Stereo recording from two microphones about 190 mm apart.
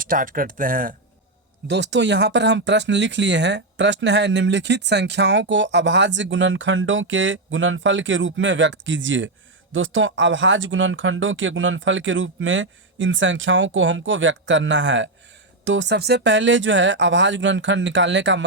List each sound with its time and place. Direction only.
0.0 s speech: 45° right (ahead or behind)
1.6 s speech: 65° right (ahead or behind)
9.7 s speech: 90° right; by 18.4 s 75° right (ahead or behind)